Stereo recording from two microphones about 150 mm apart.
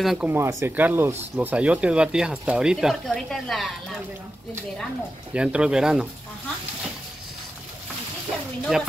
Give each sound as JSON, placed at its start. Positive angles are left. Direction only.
{"t": 0.0, "sound": "speech", "side_deg": -5}
{"t": 0.3, "sound": "speech", "side_deg": -15}
{"t": 5.3, "sound": "speech", "side_deg": -10}
{"t": 8.7, "sound": "speech", "side_deg": 0}